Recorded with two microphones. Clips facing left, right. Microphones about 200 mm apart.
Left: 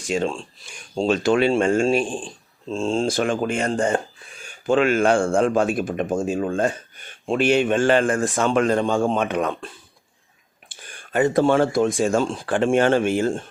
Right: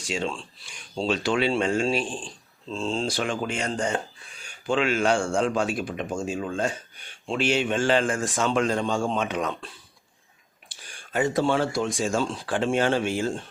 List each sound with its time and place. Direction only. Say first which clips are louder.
0.1 s speech: left 6 dB; 45° left (ahead or behind)
10.7 s speech: left 5 dB; 55° left (ahead or behind)